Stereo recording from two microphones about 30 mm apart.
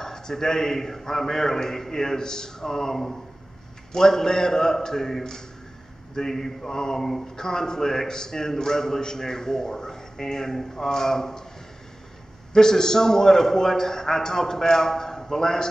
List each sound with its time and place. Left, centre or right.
0.0 s a man's voice: centre
7.0 s a man's voice: centre
7.3 s a man's voice: left
12.5 s a man's voice: centre